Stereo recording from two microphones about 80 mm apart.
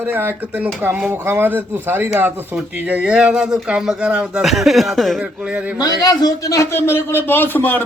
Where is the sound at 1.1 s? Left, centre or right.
Right; by 5.2 s centre.